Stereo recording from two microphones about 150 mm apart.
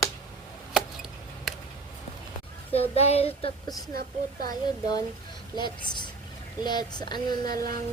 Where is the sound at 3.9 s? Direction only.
80° right.